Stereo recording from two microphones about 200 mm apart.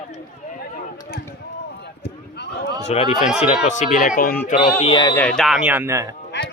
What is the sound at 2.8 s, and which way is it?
Speech, 30° left (ahead or behind).